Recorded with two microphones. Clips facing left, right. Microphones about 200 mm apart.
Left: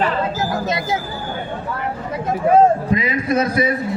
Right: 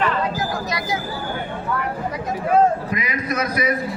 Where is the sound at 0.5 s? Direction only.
25° left (ahead or behind).